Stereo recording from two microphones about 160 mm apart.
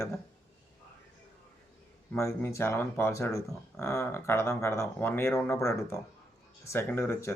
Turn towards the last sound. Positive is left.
turn(degrees=15)  # may be behind; listen again after turning